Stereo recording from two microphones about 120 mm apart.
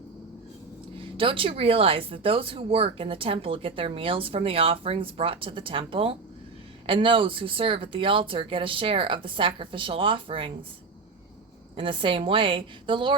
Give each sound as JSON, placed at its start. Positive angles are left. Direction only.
{"t": 0.9, "sound": "speech", "side_deg": -45}
{"t": 11.8, "sound": "speech", "side_deg": -45}